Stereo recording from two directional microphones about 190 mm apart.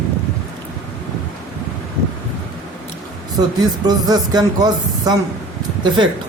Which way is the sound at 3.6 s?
20° right (ahead or behind).